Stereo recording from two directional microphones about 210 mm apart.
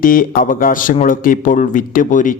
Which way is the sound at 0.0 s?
40° left (ahead or behind).